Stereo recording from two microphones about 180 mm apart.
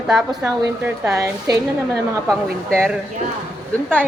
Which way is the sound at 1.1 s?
20° right (ahead or behind).